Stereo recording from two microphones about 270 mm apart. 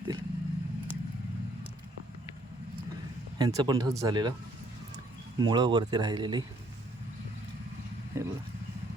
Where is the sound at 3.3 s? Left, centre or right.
Centre.